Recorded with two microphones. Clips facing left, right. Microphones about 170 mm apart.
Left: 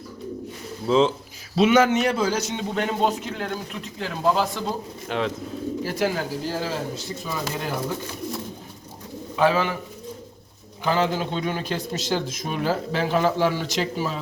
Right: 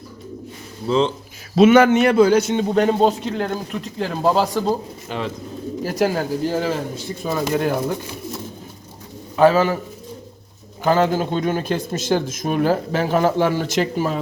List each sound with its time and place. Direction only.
0.9 s speech: 5° left (ahead or behind)
1.5 s speech: 55° right (ahead or behind); by 4.6 s 40° right (ahead or behind)
5.0 s speech: centre (ahead or behind)
5.8 s speech: 40° right (ahead or behind)
9.3 s speech: 45° right (ahead or behind)
10.8 s speech: 45° right (ahead or behind)